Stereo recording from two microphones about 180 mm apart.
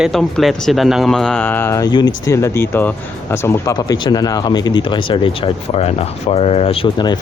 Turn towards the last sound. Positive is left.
turn(degrees=25)  # may be behind; listen again after turning